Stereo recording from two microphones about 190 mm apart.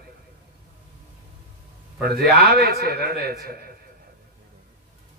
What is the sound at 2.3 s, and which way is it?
Speech, 55° right (ahead or behind).